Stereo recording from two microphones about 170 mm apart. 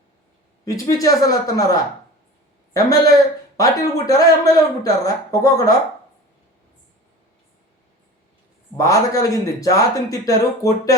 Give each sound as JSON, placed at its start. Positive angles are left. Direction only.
{"t": 0.6, "sound": "speech", "side_deg": 20}
{"t": 8.8, "sound": "speech", "side_deg": 20}